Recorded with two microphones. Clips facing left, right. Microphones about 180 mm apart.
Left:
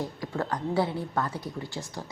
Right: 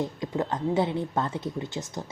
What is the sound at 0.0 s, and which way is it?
A woman's voice, 20° right (ahead or behind).